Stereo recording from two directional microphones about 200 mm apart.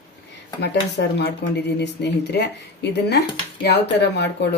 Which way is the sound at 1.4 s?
60° left (ahead or behind).